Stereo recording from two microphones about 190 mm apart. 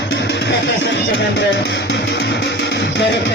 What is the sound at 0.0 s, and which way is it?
Music, 65° left (ahead or behind).